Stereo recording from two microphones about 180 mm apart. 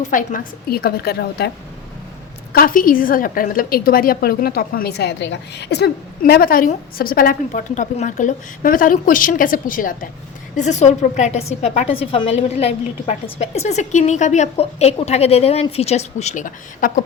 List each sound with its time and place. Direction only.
0.0 s a woman's voice: 45° left (ahead or behind); by 1.5 s 60° left (ahead or behind)
2.5 s a woman's voice: 55° left (ahead or behind)